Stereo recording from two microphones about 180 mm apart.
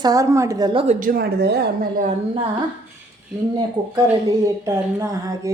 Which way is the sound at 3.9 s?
20° right (ahead or behind).